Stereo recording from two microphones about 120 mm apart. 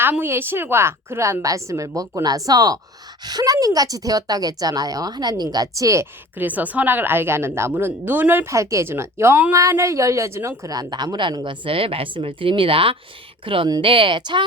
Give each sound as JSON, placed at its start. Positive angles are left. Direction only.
{"t": 0.0, "sound": "a woman's voice", "side_deg": -15}